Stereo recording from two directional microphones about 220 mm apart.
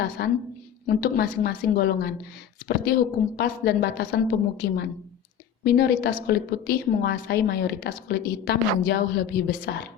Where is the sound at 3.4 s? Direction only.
45° left (ahead or behind).